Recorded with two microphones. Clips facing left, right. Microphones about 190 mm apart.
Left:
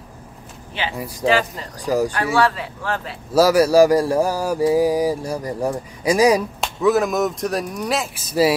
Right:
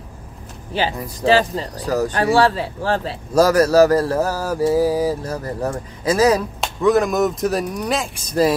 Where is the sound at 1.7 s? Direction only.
10° left (ahead or behind).